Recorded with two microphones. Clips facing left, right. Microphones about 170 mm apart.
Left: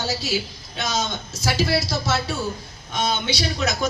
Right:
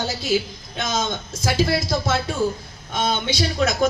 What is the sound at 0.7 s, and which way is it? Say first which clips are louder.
Speech: right 1 dB; 50° right (ahead or behind).